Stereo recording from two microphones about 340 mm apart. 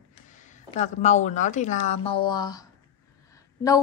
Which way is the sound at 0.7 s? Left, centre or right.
Centre.